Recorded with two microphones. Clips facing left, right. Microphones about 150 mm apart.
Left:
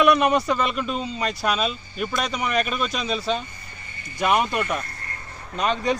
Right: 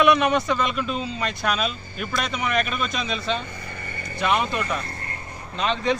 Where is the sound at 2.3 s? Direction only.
35° left (ahead or behind).